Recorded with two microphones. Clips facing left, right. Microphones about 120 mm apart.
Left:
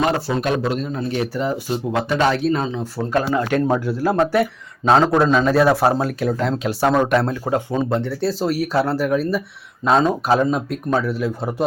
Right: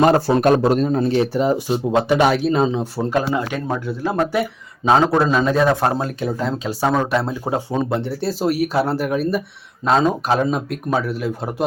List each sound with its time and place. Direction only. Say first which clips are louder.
0.0 s a man's voice: right 6 dB; 40° right (ahead or behind)
1.2 s speech: right 4 dB; 25° right (ahead or behind)
3.7 s a man's voice: left 4 dB; 5° left (ahead or behind)